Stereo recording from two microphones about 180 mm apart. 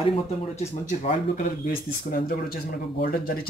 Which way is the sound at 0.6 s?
40° left (ahead or behind).